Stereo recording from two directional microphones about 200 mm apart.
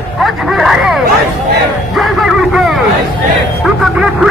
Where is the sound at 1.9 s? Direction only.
Centre (ahead or behind).